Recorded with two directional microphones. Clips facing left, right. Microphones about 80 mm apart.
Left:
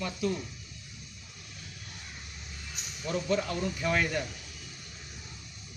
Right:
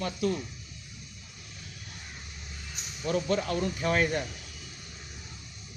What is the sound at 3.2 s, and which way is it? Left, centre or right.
Speech, right.